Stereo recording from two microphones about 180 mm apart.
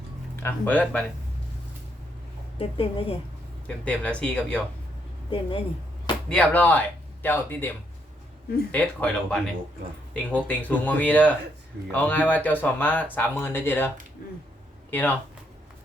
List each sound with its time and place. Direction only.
0.4 s speech: 10° left (ahead or behind)
2.6 s a woman's voice: 30° left (ahead or behind)
3.8 s speech: 5° left (ahead or behind)
5.3 s speech: 30° left (ahead or behind)
6.2 s speech: 5° left (ahead or behind)
8.7 s speech: 10° left (ahead or behind)
10.4 s speech: 10° left (ahead or behind)